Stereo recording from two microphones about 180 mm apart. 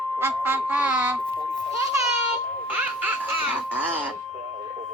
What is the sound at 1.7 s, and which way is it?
A child's voice, 20° right (ahead or behind).